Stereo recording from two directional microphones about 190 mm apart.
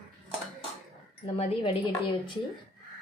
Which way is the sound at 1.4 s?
30° left (ahead or behind).